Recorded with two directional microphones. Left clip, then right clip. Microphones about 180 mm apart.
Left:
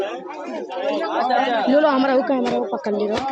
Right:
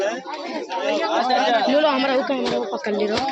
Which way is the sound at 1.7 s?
35° left (ahead or behind).